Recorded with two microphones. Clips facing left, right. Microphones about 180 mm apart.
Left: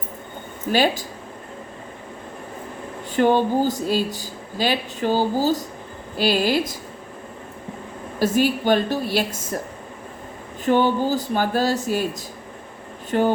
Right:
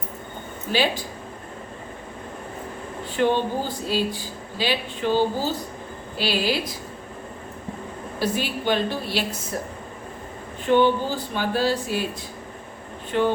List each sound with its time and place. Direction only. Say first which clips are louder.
0.7 s speech: left 4 dB; 45° left (ahead or behind)
3.2 s speech: left 4 dB; 45° left (ahead or behind)
8.2 s speech: left 6 dB; 45° left (ahead or behind)
10.7 s speech: left 1 dB; 40° left (ahead or behind)
13.1 s speech: left 2 dB; 45° left (ahead or behind)